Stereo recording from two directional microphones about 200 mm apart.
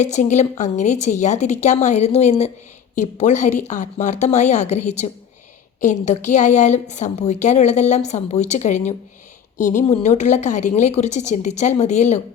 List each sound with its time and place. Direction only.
0.0 s a woman's voice: 35° left (ahead or behind)